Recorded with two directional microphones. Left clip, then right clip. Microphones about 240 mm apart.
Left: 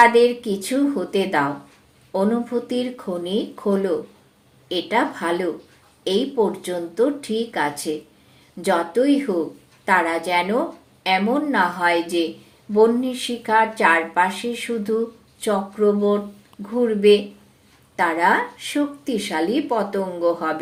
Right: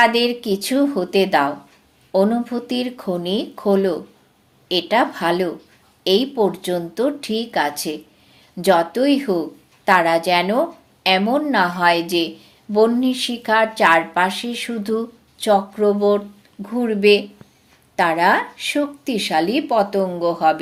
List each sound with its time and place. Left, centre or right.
0.0 s speech: right
17.9 s speech: right